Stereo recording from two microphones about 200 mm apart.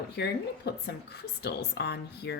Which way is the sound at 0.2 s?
60° left (ahead or behind).